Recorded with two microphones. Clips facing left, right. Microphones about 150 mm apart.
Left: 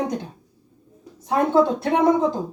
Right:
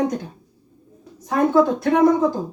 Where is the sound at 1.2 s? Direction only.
25° left (ahead or behind).